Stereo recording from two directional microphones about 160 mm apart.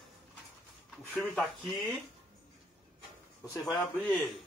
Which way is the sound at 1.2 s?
Centre (ahead or behind).